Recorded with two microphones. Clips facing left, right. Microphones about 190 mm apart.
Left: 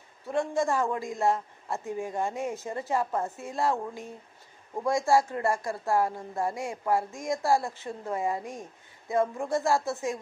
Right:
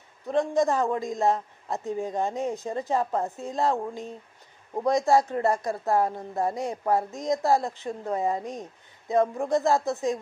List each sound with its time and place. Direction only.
0.3 s a woman's voice: 20° right (ahead or behind)